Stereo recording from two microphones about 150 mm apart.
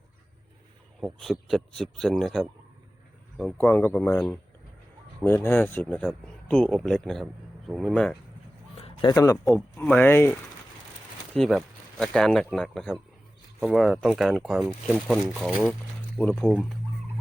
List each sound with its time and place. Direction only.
1.0 s speech: centre (ahead or behind)
3.6 s speech: 15° left (ahead or behind)
8.8 s speech: 30° left (ahead or behind)
9.7 s speech: 10° left (ahead or behind)
11.3 s speech: centre (ahead or behind)